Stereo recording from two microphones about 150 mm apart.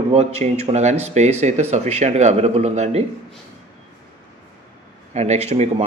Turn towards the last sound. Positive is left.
turn(degrees=-45)  # may be behind; listen again after turning